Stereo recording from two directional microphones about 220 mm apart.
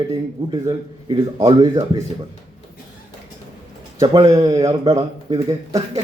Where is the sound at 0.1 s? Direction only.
15° right (ahead or behind).